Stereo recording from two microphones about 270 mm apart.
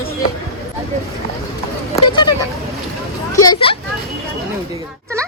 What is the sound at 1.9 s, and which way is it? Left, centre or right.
Speech, centre.